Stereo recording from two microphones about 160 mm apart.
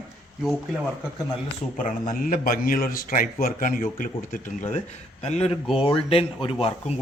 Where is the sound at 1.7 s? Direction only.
55° left (ahead or behind).